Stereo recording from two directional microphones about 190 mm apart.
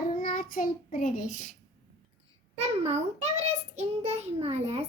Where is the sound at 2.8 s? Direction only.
35° right (ahead or behind).